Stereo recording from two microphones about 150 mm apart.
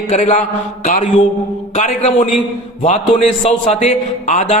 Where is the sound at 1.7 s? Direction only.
50° left (ahead or behind).